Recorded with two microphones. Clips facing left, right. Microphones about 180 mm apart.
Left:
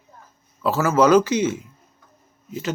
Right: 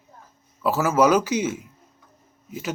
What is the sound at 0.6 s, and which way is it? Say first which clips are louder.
Speech: left 1 dB; 10° right (ahead or behind).